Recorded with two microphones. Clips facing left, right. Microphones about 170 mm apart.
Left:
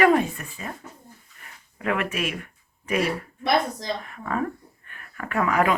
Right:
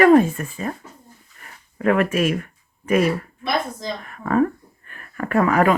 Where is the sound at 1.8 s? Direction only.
45° right (ahead or behind).